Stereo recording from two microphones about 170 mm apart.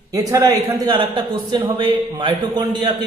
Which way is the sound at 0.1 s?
20° right (ahead or behind).